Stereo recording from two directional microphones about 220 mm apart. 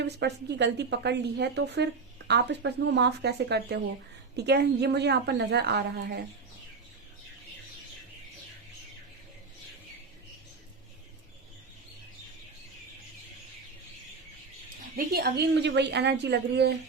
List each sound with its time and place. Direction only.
0.0 s a woman's voice: 50° right (ahead or behind)
14.9 s a woman's voice: 45° right (ahead or behind)